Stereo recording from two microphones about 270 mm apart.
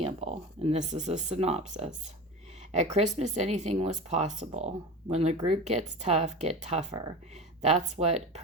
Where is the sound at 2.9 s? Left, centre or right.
Right.